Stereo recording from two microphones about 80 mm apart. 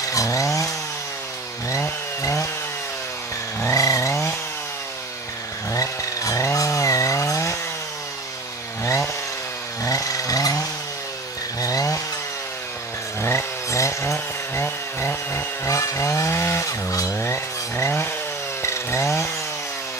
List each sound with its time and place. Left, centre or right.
0.1 s chainsaw: left
3.6 s chainsaw: left
5.7 s chainsaw: left
8.8 s chainsaw: left
11.6 s chainsaw: left
13.2 s chainsaw: left